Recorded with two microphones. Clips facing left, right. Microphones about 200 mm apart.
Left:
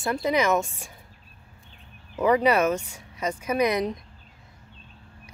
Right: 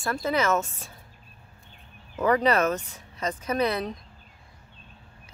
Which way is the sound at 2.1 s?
10° left (ahead or behind).